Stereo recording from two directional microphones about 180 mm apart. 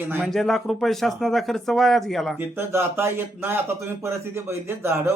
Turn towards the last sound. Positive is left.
turn(degrees=-15)  # may be behind; listen again after turning